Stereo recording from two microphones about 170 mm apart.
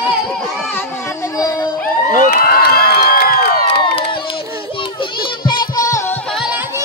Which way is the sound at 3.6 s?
35° left (ahead or behind).